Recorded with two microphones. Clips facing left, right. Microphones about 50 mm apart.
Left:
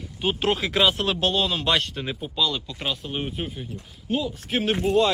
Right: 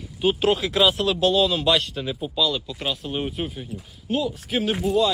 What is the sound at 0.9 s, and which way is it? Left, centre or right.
Speech, left.